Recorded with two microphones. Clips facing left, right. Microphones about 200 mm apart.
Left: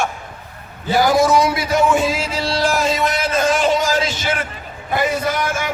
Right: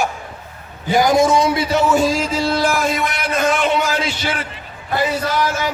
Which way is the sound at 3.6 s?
40° left (ahead or behind).